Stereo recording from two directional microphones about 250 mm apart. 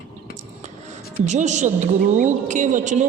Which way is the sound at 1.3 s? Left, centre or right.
Right.